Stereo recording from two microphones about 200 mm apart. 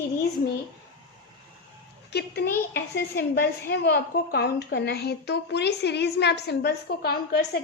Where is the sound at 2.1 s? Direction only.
55° left (ahead or behind).